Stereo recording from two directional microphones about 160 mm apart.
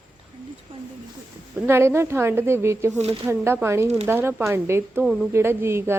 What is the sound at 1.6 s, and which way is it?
Speech, 15° right (ahead or behind).